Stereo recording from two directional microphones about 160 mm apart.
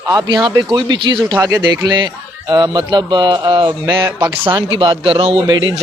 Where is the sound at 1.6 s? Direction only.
25° right (ahead or behind).